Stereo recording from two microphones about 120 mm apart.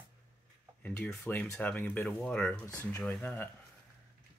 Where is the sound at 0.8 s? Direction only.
15° left (ahead or behind).